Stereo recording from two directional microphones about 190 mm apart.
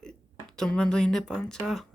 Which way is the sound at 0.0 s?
5° left (ahead or behind).